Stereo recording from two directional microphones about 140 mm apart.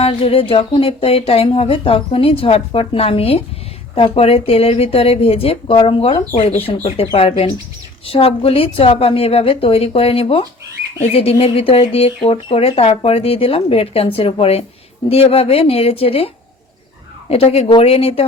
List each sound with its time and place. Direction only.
0.0 s speech: 40° left (ahead or behind)